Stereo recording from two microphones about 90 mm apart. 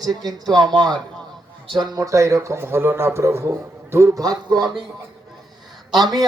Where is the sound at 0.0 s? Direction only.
45° right (ahead or behind).